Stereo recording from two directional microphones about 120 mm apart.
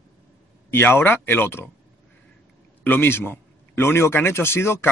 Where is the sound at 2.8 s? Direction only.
15° left (ahead or behind).